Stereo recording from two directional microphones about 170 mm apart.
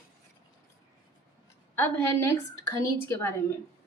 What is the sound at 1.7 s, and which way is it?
A woman's voice, 15° left (ahead or behind).